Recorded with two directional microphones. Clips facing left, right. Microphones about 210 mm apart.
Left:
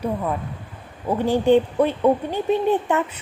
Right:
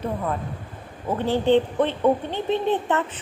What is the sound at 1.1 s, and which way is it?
A woman's voice, 15° left (ahead or behind).